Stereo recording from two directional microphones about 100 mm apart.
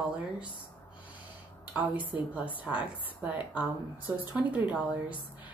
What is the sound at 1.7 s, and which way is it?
Speech, 15° right (ahead or behind).